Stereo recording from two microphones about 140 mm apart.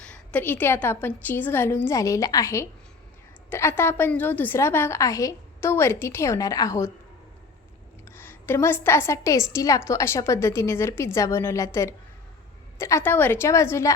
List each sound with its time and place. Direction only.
0.0 s a woman's voice: 10° left (ahead or behind)
8.0 s a woman's voice: 15° left (ahead or behind)